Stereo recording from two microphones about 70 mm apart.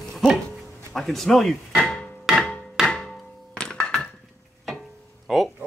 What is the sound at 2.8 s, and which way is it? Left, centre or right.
Music, centre.